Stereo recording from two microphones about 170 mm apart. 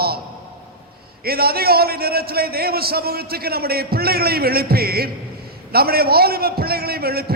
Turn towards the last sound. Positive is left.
turn(degrees=-65)  # may be behind; listen again after turning